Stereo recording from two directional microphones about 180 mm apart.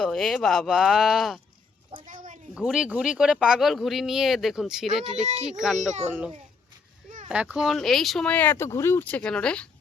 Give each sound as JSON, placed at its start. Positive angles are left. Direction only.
{"t": 0.0, "sound": "speech", "side_deg": 0}
{"t": 2.0, "sound": "a sound", "side_deg": -45}
{"t": 2.6, "sound": "speech", "side_deg": -5}